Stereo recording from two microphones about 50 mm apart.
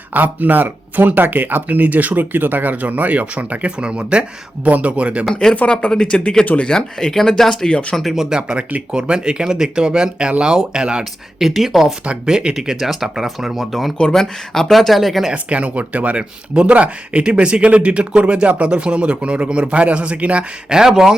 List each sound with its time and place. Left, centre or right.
0.1 s speech: right
5.3 s speech: centre; by 6.7 s left
6.7 s speech: centre
7.7 s speech: left
7.9 s speech: centre
8.3 s speech: centre
11.3 s speech: centre
12.0 s speech: centre
14.0 s speech: centre
15.3 s speech: right
20.7 s speech: centre